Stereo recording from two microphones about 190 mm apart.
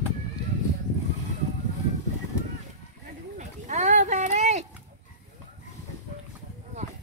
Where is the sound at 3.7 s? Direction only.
40° right (ahead or behind).